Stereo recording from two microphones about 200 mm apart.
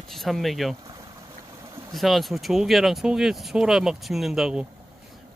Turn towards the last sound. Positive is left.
turn(degrees=0)  # may be behind; listen again after turning